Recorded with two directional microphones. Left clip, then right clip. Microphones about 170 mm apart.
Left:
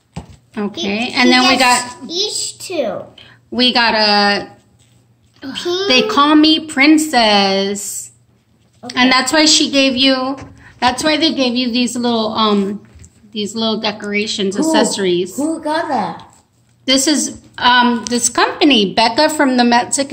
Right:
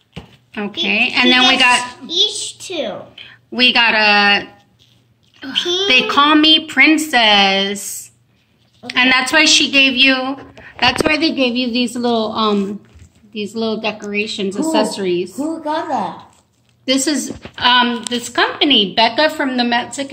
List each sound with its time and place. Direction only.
0.5 s a woman's voice: 10° left (ahead or behind)
8.8 s a woman's voice: centre (ahead or behind)
15.3 s a woman's voice: 40° left (ahead or behind)
16.8 s a woman's voice: 10° left (ahead or behind)